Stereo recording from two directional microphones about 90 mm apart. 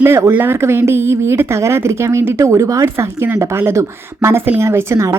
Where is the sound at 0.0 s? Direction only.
25° right (ahead or behind).